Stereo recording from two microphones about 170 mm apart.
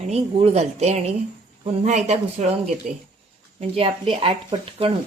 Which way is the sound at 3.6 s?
35° right (ahead or behind).